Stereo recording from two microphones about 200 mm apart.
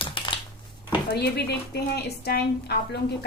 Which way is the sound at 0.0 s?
25° left (ahead or behind).